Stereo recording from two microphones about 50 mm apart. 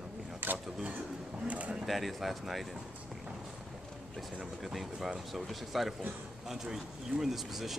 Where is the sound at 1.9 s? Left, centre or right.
Centre.